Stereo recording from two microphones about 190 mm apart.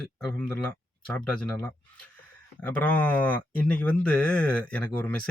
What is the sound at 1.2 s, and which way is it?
Speech, 5° left (ahead or behind).